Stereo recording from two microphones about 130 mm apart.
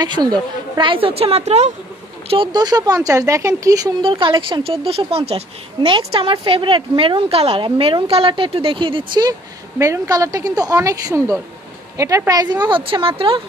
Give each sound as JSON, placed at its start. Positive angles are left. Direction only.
{"t": 0.0, "sound": "a woman's voice", "side_deg": -35}
{"t": 2.2, "sound": "speech", "side_deg": -40}
{"t": 4.0, "sound": "a woman's voice", "side_deg": -40}